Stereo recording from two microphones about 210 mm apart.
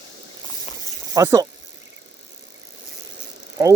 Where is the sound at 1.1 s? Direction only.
15° right (ahead or behind).